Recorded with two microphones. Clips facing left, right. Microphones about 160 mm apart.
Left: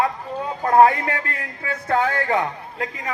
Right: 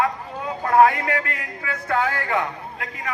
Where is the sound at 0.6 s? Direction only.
30° left (ahead or behind).